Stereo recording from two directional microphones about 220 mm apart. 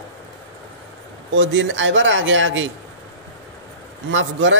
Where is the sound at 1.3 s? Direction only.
60° right (ahead or behind).